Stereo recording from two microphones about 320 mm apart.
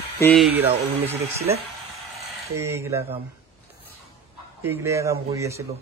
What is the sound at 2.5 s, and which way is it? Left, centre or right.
Speech, centre.